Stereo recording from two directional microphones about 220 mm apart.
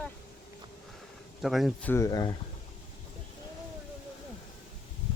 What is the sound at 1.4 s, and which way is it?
Speech, centre (ahead or behind).